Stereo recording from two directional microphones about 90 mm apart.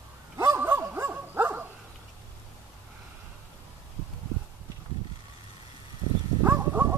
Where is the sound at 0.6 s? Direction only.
25° right (ahead or behind).